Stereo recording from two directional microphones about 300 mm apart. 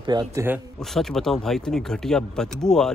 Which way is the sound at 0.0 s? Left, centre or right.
Centre.